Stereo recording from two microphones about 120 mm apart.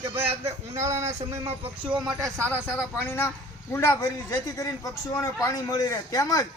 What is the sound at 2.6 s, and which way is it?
A man's voice, 20° left (ahead or behind).